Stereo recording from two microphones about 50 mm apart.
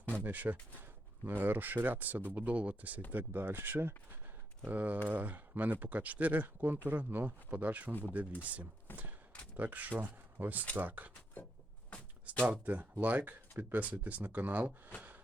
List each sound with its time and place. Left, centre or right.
0.1 s speech: right
3.1 s speech: right
8.9 s a sound: left
9.6 s speech: right
12.5 s speech: right